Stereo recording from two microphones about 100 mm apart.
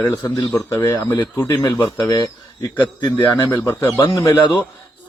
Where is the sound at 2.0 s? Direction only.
35° left (ahead or behind).